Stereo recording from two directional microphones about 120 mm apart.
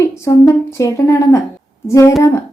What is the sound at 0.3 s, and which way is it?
Speech, 25° left (ahead or behind).